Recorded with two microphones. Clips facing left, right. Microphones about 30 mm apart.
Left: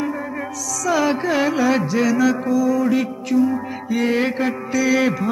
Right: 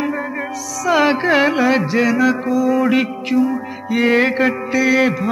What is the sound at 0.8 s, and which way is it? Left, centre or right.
Music, right.